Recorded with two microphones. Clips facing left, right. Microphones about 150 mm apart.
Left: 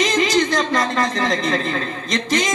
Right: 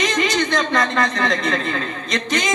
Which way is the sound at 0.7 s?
40° left (ahead or behind).